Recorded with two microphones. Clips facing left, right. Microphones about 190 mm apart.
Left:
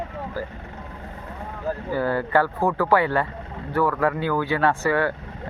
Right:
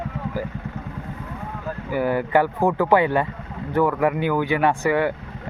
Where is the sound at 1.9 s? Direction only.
15° right (ahead or behind).